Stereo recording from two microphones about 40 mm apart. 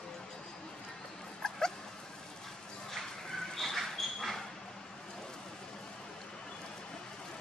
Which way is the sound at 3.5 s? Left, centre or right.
Centre.